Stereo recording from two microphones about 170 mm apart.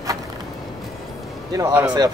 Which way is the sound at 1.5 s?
10° right (ahead or behind).